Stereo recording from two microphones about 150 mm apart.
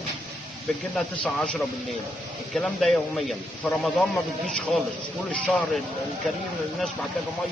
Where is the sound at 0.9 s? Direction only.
5° left (ahead or behind).